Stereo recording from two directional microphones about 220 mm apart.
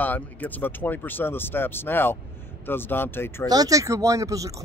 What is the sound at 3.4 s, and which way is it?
Speech, 15° right (ahead or behind).